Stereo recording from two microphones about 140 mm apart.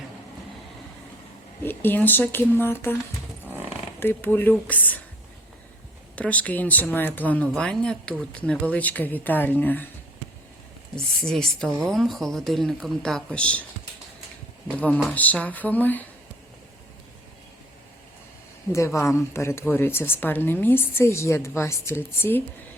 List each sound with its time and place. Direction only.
1.6 s a woman's voice: 15° left (ahead or behind)
4.0 s a woman's voice: 15° left (ahead or behind)
6.1 s a woman's voice: 10° left (ahead or behind)
11.3 s speech: 5° left (ahead or behind)
14.8 s a woman's voice: 10° left (ahead or behind)
18.7 s a woman's voice: 20° left (ahead or behind)